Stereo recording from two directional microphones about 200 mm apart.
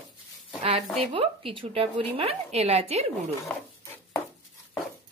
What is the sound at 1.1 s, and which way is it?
A woman's voice, 30° right (ahead or behind).